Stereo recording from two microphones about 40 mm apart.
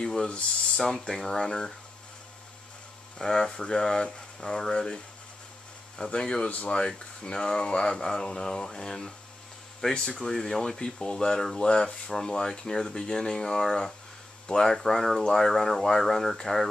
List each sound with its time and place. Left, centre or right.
0.0 s speech: centre
3.2 s speech: centre
6.0 s speech: left